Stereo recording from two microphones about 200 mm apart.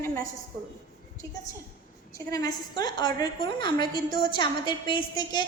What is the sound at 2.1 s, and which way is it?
A woman's voice, 20° left (ahead or behind).